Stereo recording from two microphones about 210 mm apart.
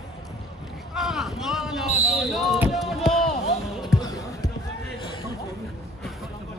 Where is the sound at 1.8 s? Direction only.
30° left (ahead or behind).